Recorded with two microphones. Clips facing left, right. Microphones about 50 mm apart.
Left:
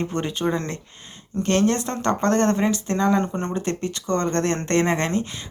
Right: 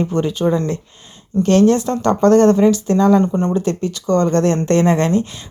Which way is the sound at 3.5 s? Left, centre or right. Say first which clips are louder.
Right 7 dB; left.